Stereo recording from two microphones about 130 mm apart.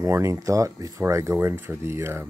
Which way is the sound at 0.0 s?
20° right (ahead or behind).